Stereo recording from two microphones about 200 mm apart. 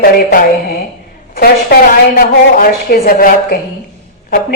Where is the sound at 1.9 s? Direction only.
45° left (ahead or behind).